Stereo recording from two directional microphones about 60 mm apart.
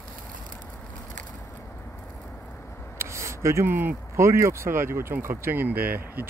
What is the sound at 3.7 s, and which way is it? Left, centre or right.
Speech, right.